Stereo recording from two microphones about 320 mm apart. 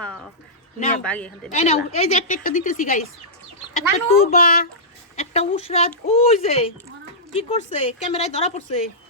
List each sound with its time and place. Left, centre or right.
0.0 s a sound: centre
1.0 s speech: centre
1.5 s a woman's voice: left